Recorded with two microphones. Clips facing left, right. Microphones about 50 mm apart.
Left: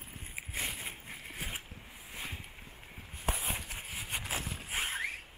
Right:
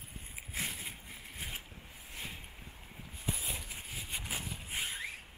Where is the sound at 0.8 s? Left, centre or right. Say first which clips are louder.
Left 3 dB; left.